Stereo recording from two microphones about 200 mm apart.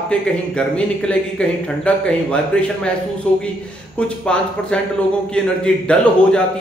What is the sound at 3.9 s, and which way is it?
A man's voice, 5° left (ahead or behind).